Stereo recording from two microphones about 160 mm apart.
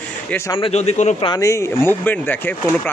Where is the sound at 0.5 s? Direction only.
40° left (ahead or behind).